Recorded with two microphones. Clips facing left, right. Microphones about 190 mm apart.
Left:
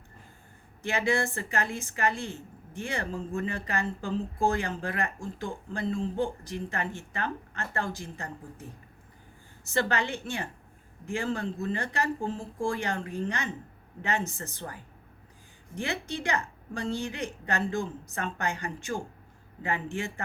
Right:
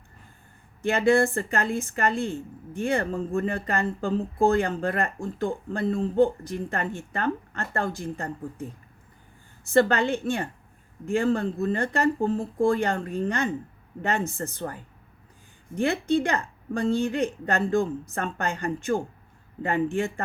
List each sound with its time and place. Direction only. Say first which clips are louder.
0.8 s a woman's voice: right 7 dB; 55° right (ahead or behind)
9.6 s a woman's voice: right 8 dB; 55° right (ahead or behind)
15.8 s a woman's voice: right 10 dB; 55° right (ahead or behind)